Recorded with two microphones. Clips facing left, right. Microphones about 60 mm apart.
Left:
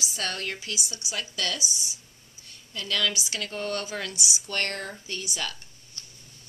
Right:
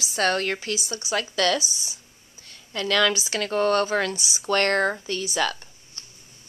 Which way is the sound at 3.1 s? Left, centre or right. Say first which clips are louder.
Right 6 dB; right.